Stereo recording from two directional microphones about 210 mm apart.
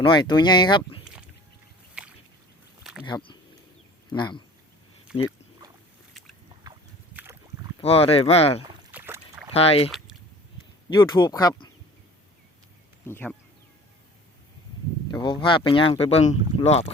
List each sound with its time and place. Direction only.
0.0 s speech: 20° left (ahead or behind)
2.0 s a sound: 5° right (ahead or behind)
3.1 s speech: 20° left (ahead or behind)
5.1 s speech: 5° right (ahead or behind)
6.7 s a sound: 10° right (ahead or behind)
7.8 s speech: 30° left (ahead or behind)
8.9 s rowboat: 10° right (ahead or behind)
9.5 s speech: 25° left (ahead or behind)
13.1 s speech: 10° left (ahead or behind)
15.1 s speech: 20° left (ahead or behind)